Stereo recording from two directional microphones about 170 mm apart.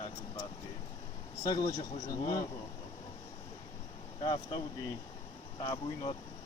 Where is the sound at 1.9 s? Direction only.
30° left (ahead or behind).